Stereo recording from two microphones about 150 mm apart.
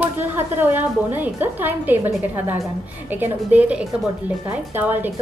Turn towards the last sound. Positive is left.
turn(degrees=-10)  # may be behind; listen again after turning